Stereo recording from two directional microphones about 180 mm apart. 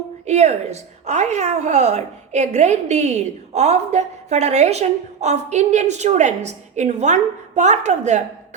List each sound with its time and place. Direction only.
0.3 s a woman's voice: 40° right (ahead or behind)